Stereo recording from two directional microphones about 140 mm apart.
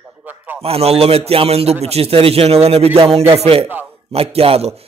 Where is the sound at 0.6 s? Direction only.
45° right (ahead or behind).